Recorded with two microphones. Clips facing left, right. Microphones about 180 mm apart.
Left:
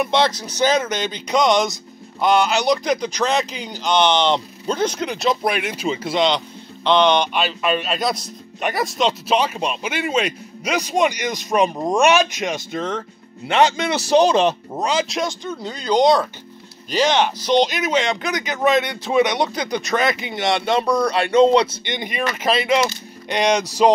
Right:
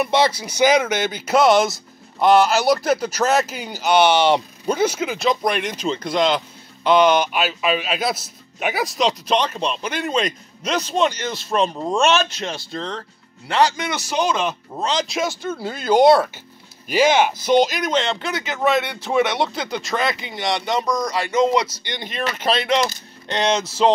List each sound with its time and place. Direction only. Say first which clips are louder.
0.0 s a man's voice: even; 5° right (ahead or behind); by 14.5 s 35° left (ahead or behind)
14.8 s speech: left 1 dB; 10° left (ahead or behind)
15.0 s speech: right 1 dB; 5° right (ahead or behind); by 23.9 s 15° left (ahead or behind)